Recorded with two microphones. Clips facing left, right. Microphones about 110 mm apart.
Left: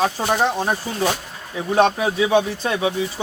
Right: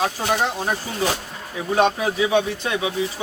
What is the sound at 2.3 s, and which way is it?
Speech, 30° left (ahead or behind).